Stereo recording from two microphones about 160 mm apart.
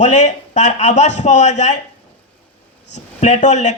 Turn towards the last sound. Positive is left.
turn(degrees=45)  # may be behind; listen again after turning